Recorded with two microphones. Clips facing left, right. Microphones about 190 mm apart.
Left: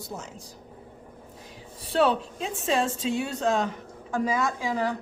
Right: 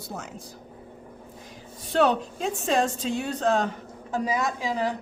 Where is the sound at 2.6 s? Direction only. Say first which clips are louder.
Even; 40° right (ahead or behind).